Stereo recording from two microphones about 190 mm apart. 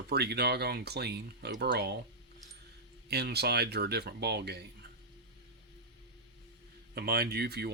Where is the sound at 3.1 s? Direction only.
60° right (ahead or behind).